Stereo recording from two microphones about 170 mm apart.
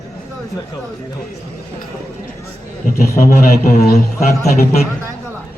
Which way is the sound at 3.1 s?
60° left (ahead or behind).